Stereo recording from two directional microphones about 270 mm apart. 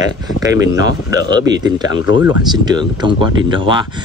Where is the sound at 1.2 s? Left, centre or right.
Centre.